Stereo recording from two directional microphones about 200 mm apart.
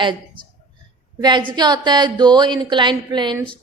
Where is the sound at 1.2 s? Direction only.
20° right (ahead or behind).